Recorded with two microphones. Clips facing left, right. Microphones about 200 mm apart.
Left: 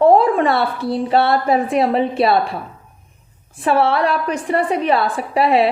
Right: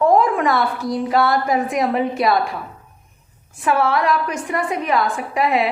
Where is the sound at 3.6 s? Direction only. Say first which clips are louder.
Left 2 dB; 30° left (ahead or behind).